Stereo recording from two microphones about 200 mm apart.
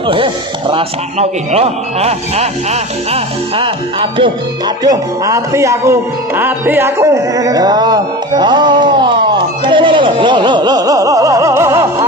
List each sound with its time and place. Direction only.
0.7 s speech: 30° right (ahead or behind)
3.6 s speech: 25° right (ahead or behind)